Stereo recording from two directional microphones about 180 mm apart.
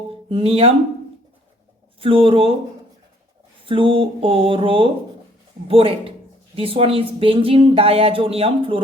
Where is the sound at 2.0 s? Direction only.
30° right (ahead or behind).